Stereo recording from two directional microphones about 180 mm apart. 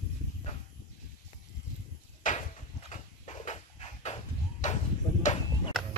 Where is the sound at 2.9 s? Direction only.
40° left (ahead or behind).